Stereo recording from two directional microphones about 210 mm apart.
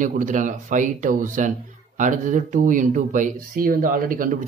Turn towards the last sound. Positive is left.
turn(degrees=-40)  # may be behind; listen again after turning